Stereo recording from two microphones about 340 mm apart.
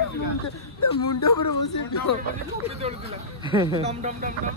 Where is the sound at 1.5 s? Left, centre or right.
Left.